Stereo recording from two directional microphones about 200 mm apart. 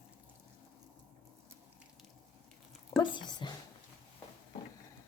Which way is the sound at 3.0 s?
25° left (ahead or behind).